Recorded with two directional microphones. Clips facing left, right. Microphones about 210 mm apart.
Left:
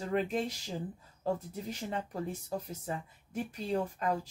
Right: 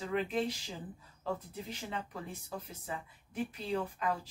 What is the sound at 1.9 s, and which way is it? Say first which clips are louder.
Speech: left 7 dB; 40° left (ahead or behind).